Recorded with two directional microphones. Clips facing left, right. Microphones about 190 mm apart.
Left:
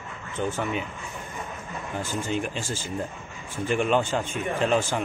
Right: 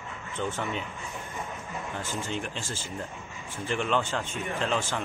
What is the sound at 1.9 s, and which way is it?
Speech, 15° left (ahead or behind).